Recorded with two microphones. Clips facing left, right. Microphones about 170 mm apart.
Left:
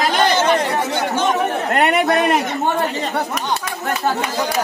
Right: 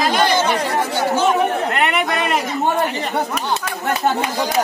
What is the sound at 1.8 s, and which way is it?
Speech, 40° left (ahead or behind).